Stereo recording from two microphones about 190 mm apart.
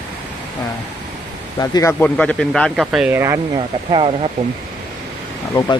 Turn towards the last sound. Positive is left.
turn(degrees=20)  # may be behind; listen again after turning